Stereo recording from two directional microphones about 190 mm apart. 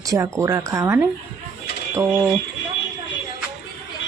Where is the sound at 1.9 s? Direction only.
15° right (ahead or behind).